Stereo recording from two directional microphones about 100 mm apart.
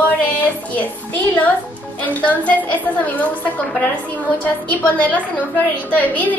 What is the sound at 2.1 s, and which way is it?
A woman's voice, 15° left (ahead or behind).